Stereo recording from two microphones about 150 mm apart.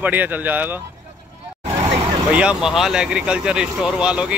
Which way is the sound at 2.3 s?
5° right (ahead or behind).